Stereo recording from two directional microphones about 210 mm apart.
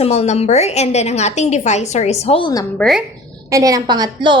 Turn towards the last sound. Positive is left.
turn(degrees=-20)  # may be behind; listen again after turning